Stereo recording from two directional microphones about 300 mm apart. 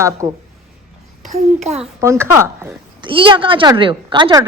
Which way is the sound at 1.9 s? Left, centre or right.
Centre.